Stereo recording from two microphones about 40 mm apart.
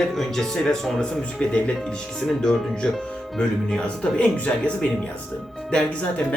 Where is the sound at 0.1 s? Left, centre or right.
Centre.